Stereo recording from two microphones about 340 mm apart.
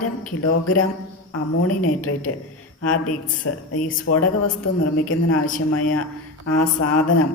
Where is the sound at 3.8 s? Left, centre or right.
Left.